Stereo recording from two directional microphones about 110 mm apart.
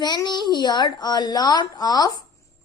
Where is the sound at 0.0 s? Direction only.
40° left (ahead or behind).